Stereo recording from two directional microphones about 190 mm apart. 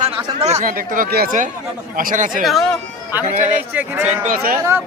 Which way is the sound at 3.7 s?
10° right (ahead or behind).